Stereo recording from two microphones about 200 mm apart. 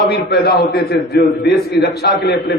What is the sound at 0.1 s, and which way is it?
A man's voice, 50° left (ahead or behind).